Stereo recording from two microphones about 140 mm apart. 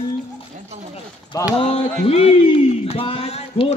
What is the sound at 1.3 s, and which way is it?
Speech, 25° left (ahead or behind).